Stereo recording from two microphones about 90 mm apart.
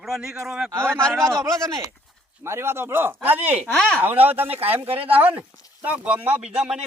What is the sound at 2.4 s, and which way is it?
Speech, 30° right (ahead or behind).